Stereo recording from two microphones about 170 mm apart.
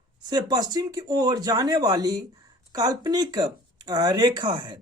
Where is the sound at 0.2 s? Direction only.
25° right (ahead or behind).